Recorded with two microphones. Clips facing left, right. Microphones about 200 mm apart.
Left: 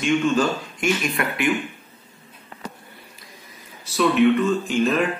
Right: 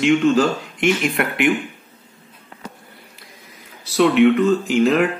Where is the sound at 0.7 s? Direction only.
65° right (ahead or behind).